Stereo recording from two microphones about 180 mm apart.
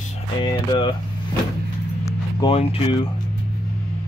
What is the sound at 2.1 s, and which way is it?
Music, 20° left (ahead or behind).